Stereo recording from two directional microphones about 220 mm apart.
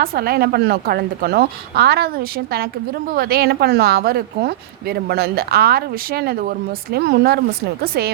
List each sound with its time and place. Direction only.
0.0 s a woman's voice: 45° right (ahead or behind)